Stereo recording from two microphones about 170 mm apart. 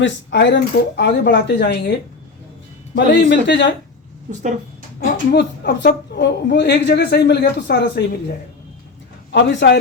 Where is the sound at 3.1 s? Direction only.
90° left.